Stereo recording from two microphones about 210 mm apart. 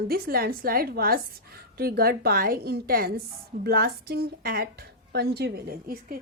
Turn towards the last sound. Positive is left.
turn(degrees=-45)  # may be behind; listen again after turning